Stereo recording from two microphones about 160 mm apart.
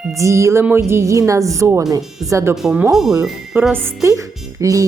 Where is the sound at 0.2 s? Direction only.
20° right (ahead or behind).